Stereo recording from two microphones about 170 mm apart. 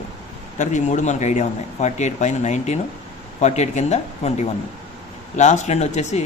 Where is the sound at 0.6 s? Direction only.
45° left (ahead or behind).